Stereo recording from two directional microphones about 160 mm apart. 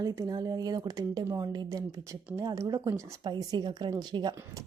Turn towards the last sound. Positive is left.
turn(degrees=-20)  # may be behind; listen again after turning